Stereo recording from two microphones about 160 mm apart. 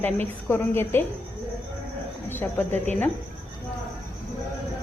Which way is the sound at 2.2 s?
15° left (ahead or behind).